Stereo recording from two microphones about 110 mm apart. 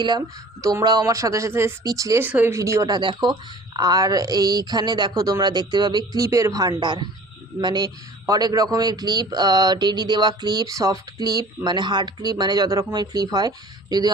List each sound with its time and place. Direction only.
0.6 s speech: 35° right (ahead or behind)
2.2 s speech: 20° right (ahead or behind)
2.6 s speech: 30° right (ahead or behind)
2.9 s a man's voice: 45° right (ahead or behind)